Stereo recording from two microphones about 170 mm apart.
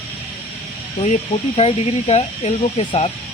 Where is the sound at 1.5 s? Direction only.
35° left (ahead or behind).